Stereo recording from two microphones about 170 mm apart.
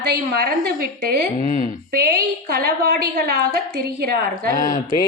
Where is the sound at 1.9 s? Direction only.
70° right (ahead or behind).